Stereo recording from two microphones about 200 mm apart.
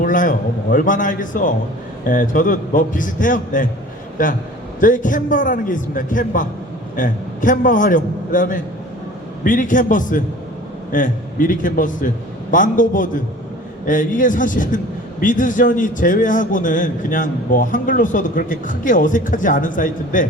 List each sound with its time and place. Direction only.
0.0 s a man's voice: 40° left (ahead or behind)